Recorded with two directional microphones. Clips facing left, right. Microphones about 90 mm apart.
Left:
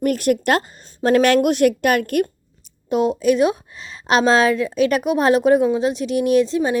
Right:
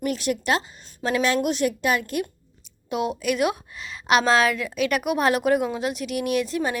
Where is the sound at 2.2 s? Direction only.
40° left (ahead or behind).